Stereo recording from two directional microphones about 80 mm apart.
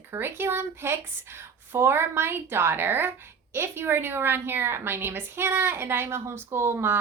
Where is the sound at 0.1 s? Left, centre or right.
Right.